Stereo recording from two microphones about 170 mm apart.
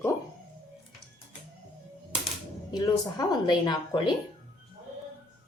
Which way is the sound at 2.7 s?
25° left (ahead or behind).